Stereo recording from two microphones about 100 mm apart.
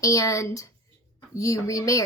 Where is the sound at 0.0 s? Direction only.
35° left (ahead or behind).